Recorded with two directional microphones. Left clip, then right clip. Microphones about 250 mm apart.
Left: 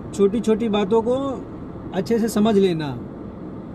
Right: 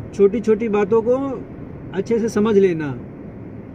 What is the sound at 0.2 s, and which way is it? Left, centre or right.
Speech, centre.